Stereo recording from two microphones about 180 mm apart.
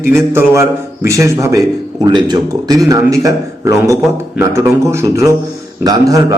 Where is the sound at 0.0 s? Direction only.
15° right (ahead or behind).